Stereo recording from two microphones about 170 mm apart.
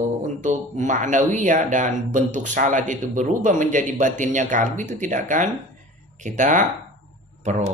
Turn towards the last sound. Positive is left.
turn(degrees=-40)  # may be behind; listen again after turning